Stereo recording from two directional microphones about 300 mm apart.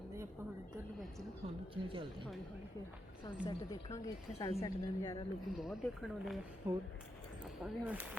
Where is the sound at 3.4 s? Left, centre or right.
Centre.